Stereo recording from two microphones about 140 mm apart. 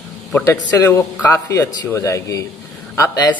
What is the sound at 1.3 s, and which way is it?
A man's voice, 20° left (ahead or behind).